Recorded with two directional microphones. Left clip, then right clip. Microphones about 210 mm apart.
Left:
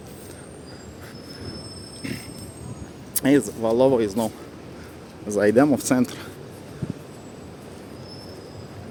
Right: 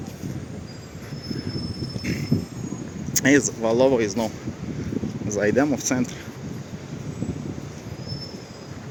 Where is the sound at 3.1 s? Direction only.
10° left (ahead or behind).